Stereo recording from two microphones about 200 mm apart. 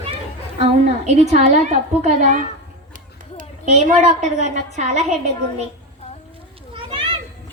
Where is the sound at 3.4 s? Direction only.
40° right (ahead or behind).